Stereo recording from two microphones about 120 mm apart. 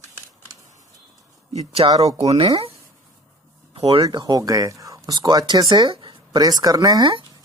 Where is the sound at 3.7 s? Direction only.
55° right (ahead or behind).